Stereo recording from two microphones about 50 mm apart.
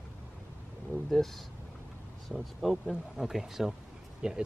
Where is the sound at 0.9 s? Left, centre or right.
Centre.